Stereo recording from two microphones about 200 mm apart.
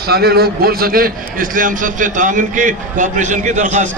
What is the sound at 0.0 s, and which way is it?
A man's voice, 50° right (ahead or behind).